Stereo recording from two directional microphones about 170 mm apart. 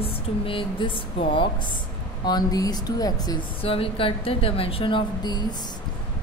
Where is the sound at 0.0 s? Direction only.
30° left (ahead or behind).